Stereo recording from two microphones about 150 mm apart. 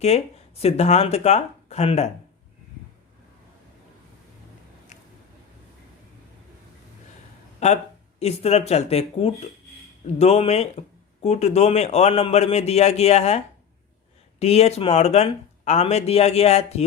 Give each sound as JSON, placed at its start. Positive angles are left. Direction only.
{"t": 0.6, "sound": "speech", "side_deg": 45}
{"t": 7.6, "sound": "speech", "side_deg": 50}